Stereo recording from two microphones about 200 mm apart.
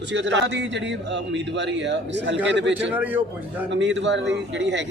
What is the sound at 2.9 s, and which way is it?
Speech, 10° right (ahead or behind).